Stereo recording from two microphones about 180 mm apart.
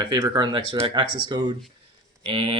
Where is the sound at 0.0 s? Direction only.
25° right (ahead or behind).